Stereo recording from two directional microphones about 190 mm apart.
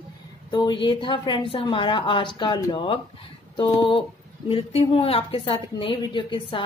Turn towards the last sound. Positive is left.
turn(degrees=25)  # may be behind; listen again after turning